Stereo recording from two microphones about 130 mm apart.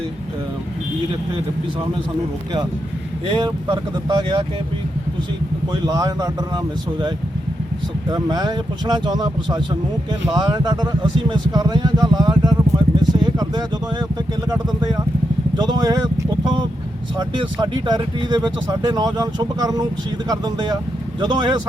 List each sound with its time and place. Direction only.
3.2 s speech: 35° right (ahead or behind)
5.7 s speech: 30° right (ahead or behind)
8.1 s speech: 30° right (ahead or behind)
17.2 s speech: 35° right (ahead or behind)